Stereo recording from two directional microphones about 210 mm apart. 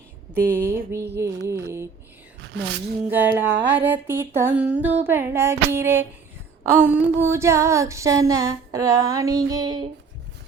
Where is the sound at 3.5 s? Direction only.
55° right (ahead or behind).